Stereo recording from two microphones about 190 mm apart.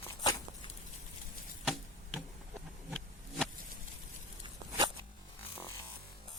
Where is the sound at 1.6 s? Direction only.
Centre (ahead or behind).